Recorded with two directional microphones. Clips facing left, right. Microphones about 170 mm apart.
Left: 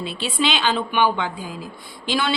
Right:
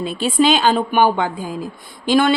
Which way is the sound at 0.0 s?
45° right (ahead or behind).